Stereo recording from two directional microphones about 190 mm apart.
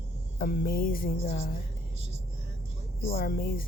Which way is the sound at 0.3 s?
50° left (ahead or behind).